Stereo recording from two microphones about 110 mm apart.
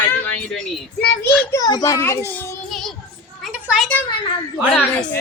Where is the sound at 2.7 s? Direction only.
5° left (ahead or behind).